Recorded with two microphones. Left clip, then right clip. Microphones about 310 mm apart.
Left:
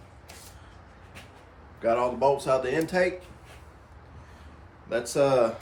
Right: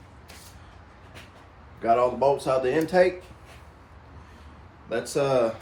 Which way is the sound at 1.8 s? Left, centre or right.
Centre.